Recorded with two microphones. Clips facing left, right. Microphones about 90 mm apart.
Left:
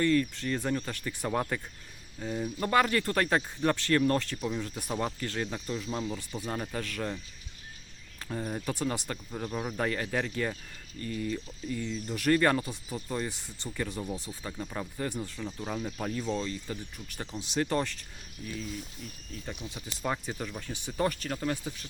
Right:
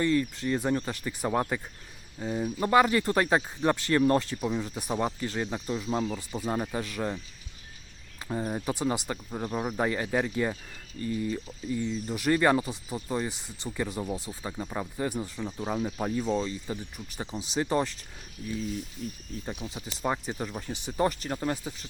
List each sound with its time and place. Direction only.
0.0 s speech: 15° right (ahead or behind)
6.0 s speech: 30° right (ahead or behind)
6.5 s speech: 20° right (ahead or behind)
8.2 s speech: 20° right (ahead or behind)
19.5 s speech: 30° right (ahead or behind)
20.1 s speech: 15° right (ahead or behind)
20.5 s speech: 25° right (ahead or behind)
20.8 s speech: 15° right (ahead or behind)